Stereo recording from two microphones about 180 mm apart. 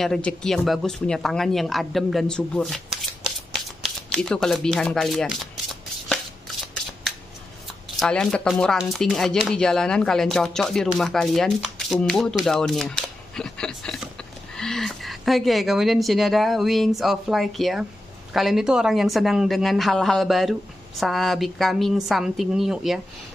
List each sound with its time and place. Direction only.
0.0 s speech: 5° left (ahead or behind)
3.3 s shuffling cards: centre (ahead or behind)
8.0 s speech: 5° left (ahead or behind)